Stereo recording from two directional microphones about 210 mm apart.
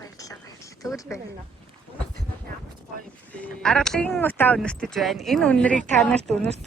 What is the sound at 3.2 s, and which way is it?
Speech, 5° left (ahead or behind).